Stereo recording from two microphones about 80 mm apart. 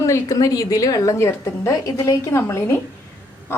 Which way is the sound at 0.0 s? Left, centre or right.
Left.